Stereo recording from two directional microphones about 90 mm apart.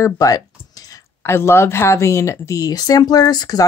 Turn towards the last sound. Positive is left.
turn(degrees=45)  # may be behind; listen again after turning